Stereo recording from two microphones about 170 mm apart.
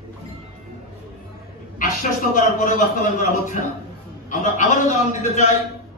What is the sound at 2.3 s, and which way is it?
A man's voice, 50° left (ahead or behind).